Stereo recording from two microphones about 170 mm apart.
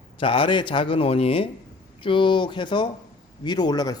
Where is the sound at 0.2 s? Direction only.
30° left (ahead or behind).